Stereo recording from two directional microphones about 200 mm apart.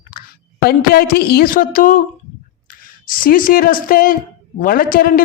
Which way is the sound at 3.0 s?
45° left (ahead or behind).